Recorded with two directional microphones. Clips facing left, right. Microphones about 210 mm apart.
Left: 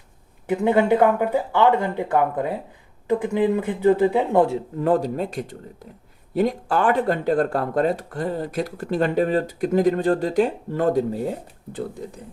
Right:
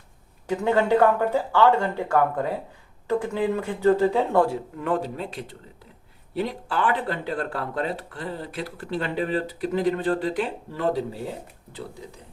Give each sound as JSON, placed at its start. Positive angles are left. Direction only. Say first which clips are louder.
{"t": 0.4, "sound": "speech", "louder": "left 3 dB", "side_deg": 15}
{"t": 4.8, "sound": "speech", "louder": "left 7 dB", "side_deg": 40}